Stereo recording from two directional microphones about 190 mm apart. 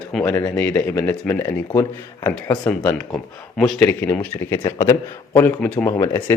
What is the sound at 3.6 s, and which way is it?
A man's voice, 5° left (ahead or behind).